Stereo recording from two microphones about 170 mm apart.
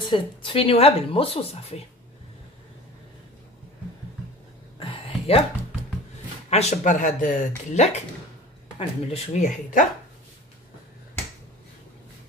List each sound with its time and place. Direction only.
0.0 s speech: 30° left (ahead or behind)
4.7 s a sound: 35° left (ahead or behind)
6.5 s speech: 45° left (ahead or behind)